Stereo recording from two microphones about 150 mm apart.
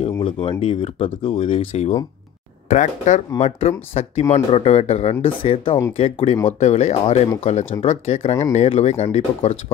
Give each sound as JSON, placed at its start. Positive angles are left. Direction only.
{"t": 0.2, "sound": "speech", "side_deg": 40}
{"t": 2.7, "sound": "speech", "side_deg": 55}